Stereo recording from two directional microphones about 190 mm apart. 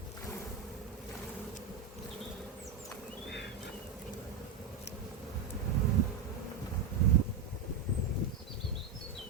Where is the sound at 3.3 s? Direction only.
60° left (ahead or behind).